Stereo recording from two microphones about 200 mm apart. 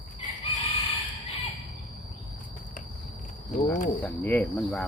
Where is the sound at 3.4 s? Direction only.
40° left (ahead or behind).